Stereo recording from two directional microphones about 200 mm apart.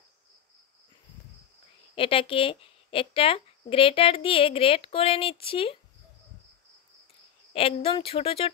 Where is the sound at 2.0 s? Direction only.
25° left (ahead or behind).